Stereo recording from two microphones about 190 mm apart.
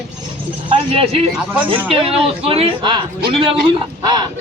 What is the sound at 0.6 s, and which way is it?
Speech, 30° right (ahead or behind).